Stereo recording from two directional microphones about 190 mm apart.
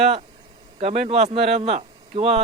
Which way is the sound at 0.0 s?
35° right (ahead or behind).